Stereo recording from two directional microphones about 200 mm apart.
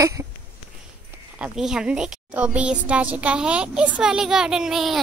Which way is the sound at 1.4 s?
5° right (ahead or behind).